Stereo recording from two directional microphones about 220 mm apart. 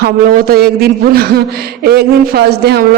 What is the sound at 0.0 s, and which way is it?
A man's voice, 45° right (ahead or behind).